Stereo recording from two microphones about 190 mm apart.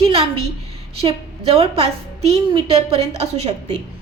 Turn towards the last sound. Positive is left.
turn(degrees=-35)  # may be behind; listen again after turning